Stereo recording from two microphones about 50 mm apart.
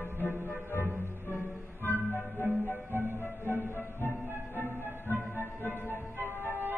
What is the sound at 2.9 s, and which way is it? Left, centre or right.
Music, right.